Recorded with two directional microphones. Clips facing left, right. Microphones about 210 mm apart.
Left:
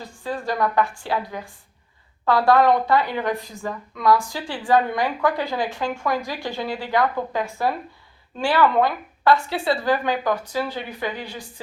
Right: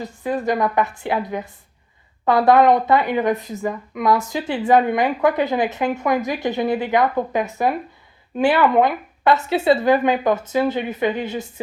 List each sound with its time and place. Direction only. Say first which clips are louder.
0.0 s speech: right 6 dB; 20° right (ahead or behind)